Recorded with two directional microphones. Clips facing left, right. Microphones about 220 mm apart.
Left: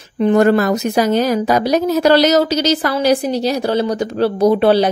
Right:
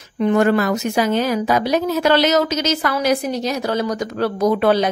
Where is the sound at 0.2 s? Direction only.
35° left (ahead or behind).